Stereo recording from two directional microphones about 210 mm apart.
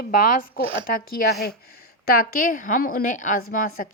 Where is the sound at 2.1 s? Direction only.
45° left (ahead or behind).